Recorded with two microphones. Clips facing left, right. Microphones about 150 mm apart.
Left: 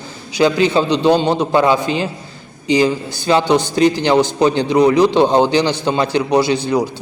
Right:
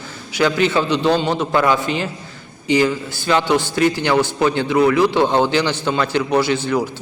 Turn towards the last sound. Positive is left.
turn(degrees=15)  # may be behind; listen again after turning